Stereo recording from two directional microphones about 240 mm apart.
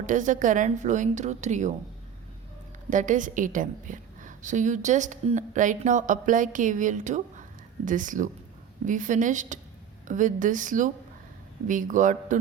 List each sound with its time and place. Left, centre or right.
0.0 s a woman's voice: right
2.9 s a woman's voice: right